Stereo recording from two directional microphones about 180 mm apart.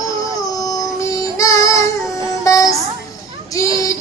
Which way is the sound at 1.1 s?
20° left (ahead or behind).